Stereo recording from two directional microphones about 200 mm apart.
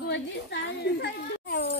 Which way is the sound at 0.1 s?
60° left (ahead or behind).